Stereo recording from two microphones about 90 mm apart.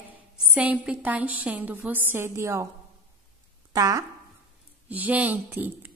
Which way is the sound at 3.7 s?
40° right (ahead or behind).